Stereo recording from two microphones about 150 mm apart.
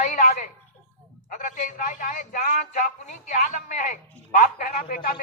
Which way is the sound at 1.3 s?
60° left (ahead or behind).